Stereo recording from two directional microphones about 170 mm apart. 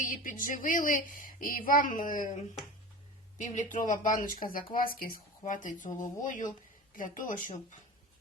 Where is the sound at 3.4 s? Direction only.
45° left (ahead or behind).